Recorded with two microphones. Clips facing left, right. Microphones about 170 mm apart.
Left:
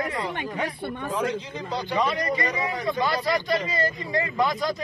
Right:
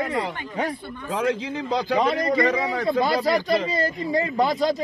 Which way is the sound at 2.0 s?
30° right (ahead or behind).